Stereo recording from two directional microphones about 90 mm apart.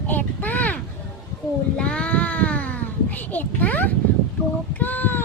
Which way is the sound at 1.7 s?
10° left (ahead or behind).